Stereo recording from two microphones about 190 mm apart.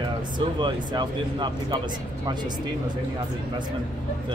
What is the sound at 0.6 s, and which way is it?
Speech, 25° right (ahead or behind).